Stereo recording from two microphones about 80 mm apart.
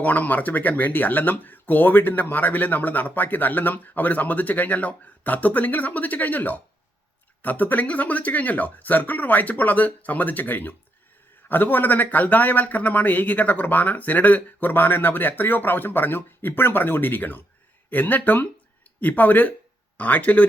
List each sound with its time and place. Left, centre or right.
0.0 s speech: centre